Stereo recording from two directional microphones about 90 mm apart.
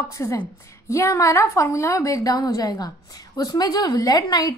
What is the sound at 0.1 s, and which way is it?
A woman's voice, 35° left (ahead or behind).